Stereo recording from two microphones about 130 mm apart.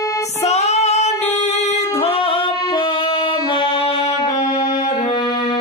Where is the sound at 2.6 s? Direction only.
35° left (ahead or behind).